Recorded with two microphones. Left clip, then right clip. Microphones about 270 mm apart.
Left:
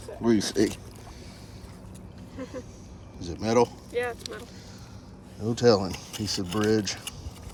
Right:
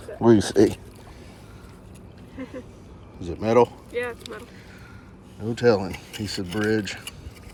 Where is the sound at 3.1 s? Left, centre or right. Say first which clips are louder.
Right 5 dB; centre.